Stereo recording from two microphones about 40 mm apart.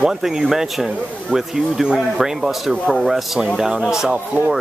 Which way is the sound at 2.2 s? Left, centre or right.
Centre.